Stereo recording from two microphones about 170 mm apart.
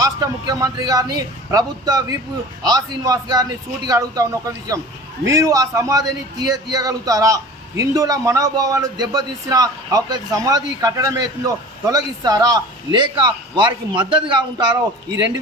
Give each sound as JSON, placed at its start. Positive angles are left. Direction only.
{"t": 0.0, "sound": "a man's voice", "side_deg": -20}